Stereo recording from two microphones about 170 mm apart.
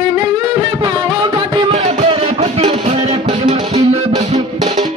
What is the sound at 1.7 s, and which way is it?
Music, 40° right (ahead or behind).